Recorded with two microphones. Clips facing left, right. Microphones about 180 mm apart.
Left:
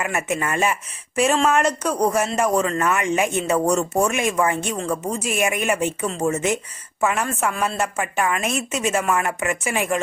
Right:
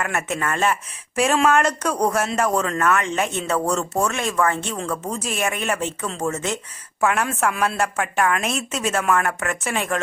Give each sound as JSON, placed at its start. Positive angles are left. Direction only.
{"t": 0.0, "sound": "speech", "side_deg": 10}
{"t": 7.0, "sound": "speech", "side_deg": 0}